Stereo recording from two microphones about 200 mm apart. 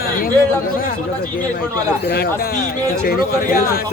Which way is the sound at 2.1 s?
55° left (ahead or behind).